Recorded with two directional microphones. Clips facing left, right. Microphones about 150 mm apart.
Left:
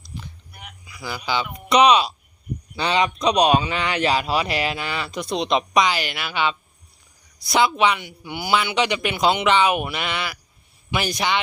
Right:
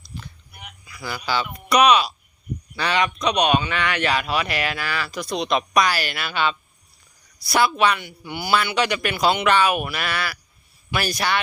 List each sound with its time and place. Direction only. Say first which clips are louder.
0.0 s whispering: left 1 dB; 15° left (ahead or behind)
0.9 s speech: even; 15° left (ahead or behind)